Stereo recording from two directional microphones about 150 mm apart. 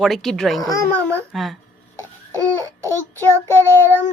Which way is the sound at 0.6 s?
20° left (ahead or behind).